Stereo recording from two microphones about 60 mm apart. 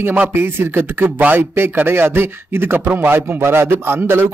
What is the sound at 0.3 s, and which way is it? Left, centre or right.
A man's voice, right.